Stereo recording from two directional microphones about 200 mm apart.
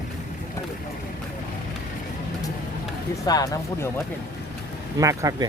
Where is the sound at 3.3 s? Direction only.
20° left (ahead or behind).